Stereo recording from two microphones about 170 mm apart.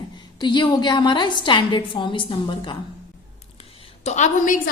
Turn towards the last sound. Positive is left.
turn(degrees=45)  # may be behind; listen again after turning